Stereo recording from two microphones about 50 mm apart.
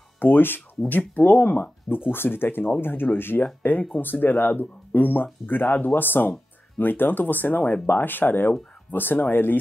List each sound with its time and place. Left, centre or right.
0.2 s speech: left
7.8 s speech: left